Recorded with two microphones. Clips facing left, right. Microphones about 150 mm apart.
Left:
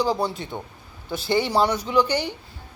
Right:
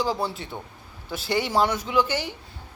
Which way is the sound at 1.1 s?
40° left (ahead or behind).